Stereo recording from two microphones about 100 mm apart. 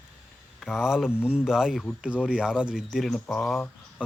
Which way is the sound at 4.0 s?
10° right (ahead or behind).